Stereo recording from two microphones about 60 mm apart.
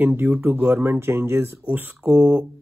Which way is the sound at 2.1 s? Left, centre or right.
Right.